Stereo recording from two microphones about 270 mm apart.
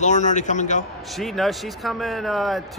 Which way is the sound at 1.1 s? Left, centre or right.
Centre.